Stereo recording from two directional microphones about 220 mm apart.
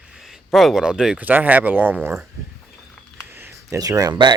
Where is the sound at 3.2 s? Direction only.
10° right (ahead or behind).